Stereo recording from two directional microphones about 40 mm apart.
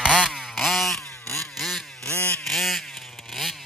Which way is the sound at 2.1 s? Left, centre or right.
Left.